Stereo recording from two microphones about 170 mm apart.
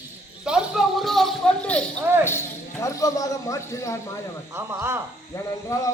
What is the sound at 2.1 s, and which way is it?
Speech, 10° right (ahead or behind).